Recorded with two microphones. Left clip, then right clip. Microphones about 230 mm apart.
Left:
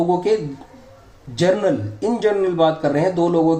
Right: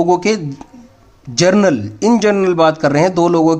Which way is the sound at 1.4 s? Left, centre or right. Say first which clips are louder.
Right 5 dB; right.